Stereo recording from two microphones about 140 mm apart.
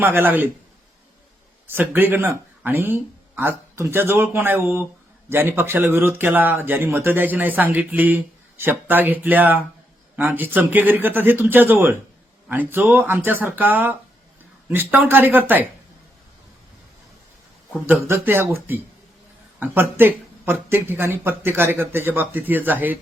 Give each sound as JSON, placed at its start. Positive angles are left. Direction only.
{"t": 0.0, "sound": "speech", "side_deg": -15}
{"t": 1.6, "sound": "speech", "side_deg": -15}
{"t": 18.1, "sound": "speech", "side_deg": -20}